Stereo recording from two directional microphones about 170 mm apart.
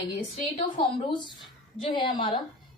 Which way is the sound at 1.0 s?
25° left (ahead or behind).